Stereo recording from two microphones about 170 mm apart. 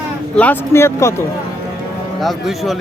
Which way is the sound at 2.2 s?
Centre (ahead or behind).